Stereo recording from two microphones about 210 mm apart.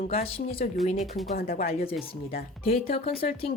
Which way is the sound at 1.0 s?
Centre (ahead or behind).